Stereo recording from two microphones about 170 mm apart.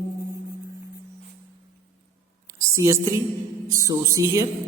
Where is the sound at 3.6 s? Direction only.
20° right (ahead or behind).